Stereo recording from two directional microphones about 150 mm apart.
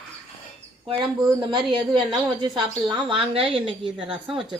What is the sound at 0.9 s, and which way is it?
Speech, 30° right (ahead or behind).